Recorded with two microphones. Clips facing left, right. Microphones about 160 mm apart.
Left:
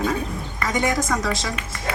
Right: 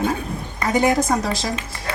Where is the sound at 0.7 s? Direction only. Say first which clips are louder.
Right 5 dB; 35° right (ahead or behind).